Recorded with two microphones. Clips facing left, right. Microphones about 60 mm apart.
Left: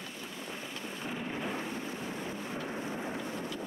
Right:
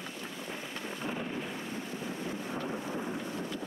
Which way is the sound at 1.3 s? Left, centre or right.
Left.